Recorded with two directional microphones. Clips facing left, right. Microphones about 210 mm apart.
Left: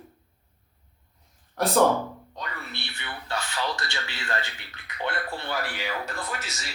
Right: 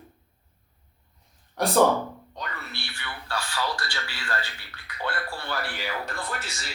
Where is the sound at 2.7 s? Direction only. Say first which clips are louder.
Left 1 dB; 20° left (ahead or behind).